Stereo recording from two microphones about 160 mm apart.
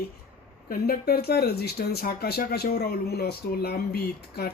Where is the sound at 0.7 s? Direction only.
70° left (ahead or behind).